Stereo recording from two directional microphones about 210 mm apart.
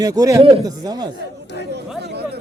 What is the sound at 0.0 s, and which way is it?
Speech, 15° right (ahead or behind).